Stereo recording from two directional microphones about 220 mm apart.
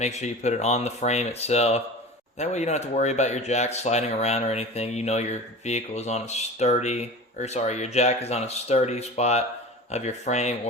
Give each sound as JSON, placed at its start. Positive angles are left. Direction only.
{"t": 0.0, "sound": "speech", "side_deg": 30}